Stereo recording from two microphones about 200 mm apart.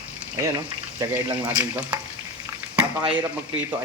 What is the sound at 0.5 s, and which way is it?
Speech, 20° right (ahead or behind).